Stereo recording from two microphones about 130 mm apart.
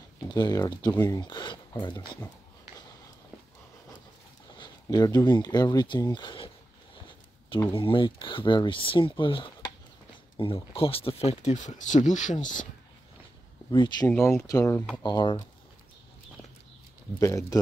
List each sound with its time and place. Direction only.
0.3 s speech: 30° left (ahead or behind)
4.8 s speech: 30° left (ahead or behind)
7.7 s speech: 40° left (ahead or behind); by 12.6 s 75° left (ahead or behind)
13.7 s speech: 35° left (ahead or behind)
14.5 s speech: 25° left (ahead or behind)
15.0 s speech: 35° left (ahead or behind)
17.2 s speech: 25° left (ahead or behind)